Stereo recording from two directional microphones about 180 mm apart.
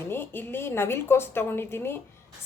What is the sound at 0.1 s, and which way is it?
Speech, 10° left (ahead or behind).